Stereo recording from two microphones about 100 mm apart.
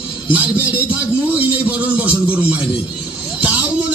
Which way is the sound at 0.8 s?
15° right (ahead or behind).